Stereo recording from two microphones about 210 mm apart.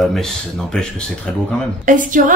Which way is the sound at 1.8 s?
40° right (ahead or behind).